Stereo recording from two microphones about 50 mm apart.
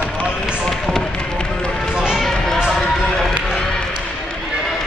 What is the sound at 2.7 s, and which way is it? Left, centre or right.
Run, centre.